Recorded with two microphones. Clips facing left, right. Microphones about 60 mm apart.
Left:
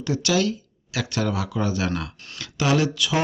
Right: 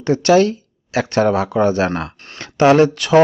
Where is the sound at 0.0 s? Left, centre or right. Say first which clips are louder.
Right 10 dB; right.